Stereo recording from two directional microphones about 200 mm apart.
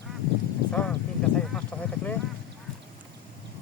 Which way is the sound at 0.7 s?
5° left (ahead or behind).